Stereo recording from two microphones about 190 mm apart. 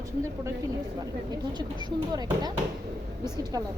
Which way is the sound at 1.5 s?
20° right (ahead or behind).